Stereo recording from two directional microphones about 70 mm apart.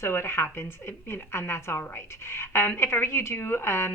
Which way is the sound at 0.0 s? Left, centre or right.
Left.